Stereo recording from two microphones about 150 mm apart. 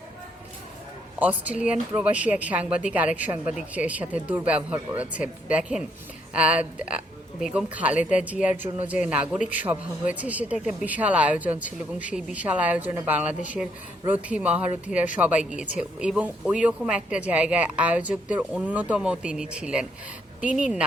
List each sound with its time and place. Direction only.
1.2 s speech: 10° right (ahead or behind)
9.7 s a man's voice: 20° right (ahead or behind)